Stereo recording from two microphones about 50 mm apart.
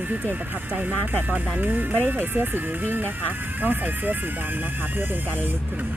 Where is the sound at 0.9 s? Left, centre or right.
Left.